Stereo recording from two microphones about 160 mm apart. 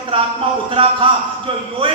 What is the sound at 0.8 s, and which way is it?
Speech, 35° right (ahead or behind).